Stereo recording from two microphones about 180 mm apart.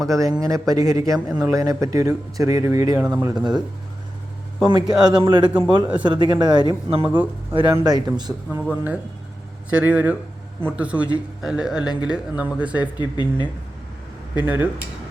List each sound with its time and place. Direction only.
0.1 s speech: 20° right (ahead or behind)
4.7 s speech: 25° right (ahead or behind)
8.4 s speech: 5° right (ahead or behind)
12.8 s speech: 25° left (ahead or behind)
14.3 s speech: 10° right (ahead or behind)